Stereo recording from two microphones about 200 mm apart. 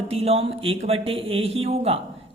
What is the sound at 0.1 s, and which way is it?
Speech, 30° right (ahead or behind).